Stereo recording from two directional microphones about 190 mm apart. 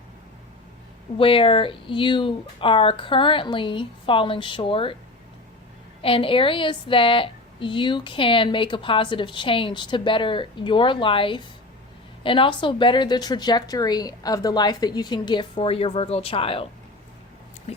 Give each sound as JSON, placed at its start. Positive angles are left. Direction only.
{"t": 1.2, "sound": "a woman's voice", "side_deg": 30}
{"t": 6.0, "sound": "a woman's voice", "side_deg": 30}
{"t": 17.7, "sound": "speech", "side_deg": 35}